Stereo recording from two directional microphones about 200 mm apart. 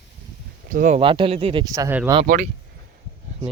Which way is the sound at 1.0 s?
25° right (ahead or behind).